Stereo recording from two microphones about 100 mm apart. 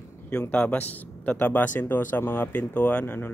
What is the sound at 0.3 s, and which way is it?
Speech, 15° left (ahead or behind).